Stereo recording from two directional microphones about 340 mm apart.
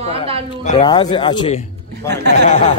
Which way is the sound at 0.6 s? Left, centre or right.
Centre.